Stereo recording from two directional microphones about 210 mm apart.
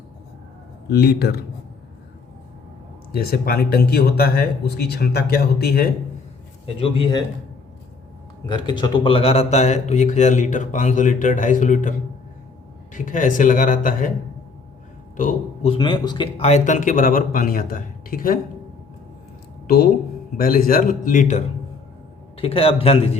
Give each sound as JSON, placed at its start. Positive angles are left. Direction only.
{"t": 0.9, "sound": "a man's voice", "side_deg": 50}
{"t": 3.1, "sound": "a man's voice", "side_deg": 45}
{"t": 6.7, "sound": "speech", "side_deg": 25}
{"t": 8.4, "sound": "speech", "side_deg": 20}
{"t": 15.1, "sound": "a man's voice", "side_deg": 40}
{"t": 15.7, "sound": "speech", "side_deg": 20}
{"t": 19.6, "sound": "a man's voice", "side_deg": 45}